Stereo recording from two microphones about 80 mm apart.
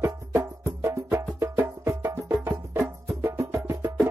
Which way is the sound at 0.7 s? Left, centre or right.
Right.